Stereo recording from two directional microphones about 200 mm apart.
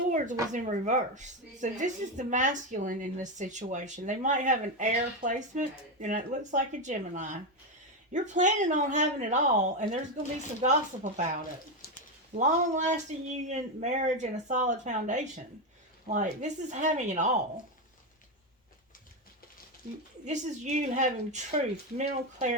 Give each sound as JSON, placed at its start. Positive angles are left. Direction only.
{"t": 0.5, "sound": "a woman's voice", "side_deg": -40}
{"t": 12.3, "sound": "a woman's voice", "side_deg": -35}
{"t": 20.2, "sound": "a woman's voice", "side_deg": -35}